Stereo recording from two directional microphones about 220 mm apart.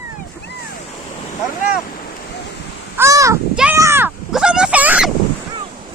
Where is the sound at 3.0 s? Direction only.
15° right (ahead or behind).